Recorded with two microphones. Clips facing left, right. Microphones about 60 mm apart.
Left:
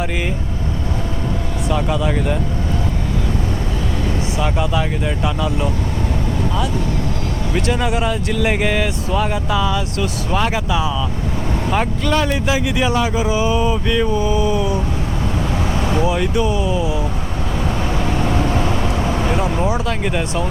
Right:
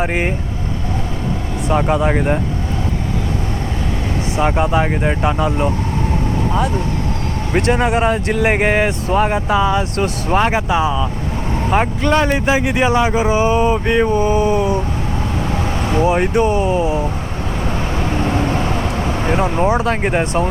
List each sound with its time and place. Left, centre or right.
0.0 s speech: right
1.7 s speech: right
4.4 s speech: right
16.0 s speech: right
18.1 s vehicle: right
19.6 s speech: right